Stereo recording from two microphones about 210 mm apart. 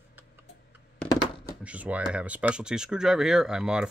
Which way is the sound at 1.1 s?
20° left (ahead or behind).